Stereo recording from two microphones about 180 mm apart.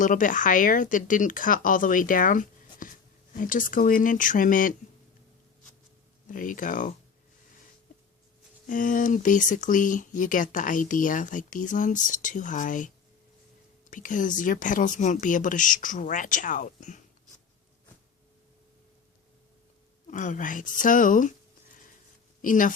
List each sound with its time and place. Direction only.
0.0 s speech: 45° left (ahead or behind)
6.2 s speech: 50° left (ahead or behind)
8.6 s speech: 45° left (ahead or behind)
13.9 s speech: 45° left (ahead or behind)
20.1 s speech: 45° left (ahead or behind)
22.4 s speech: 50° left (ahead or behind)